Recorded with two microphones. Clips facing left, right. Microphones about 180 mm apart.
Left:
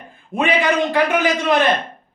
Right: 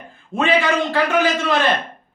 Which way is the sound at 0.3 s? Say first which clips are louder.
Even; 15° left (ahead or behind).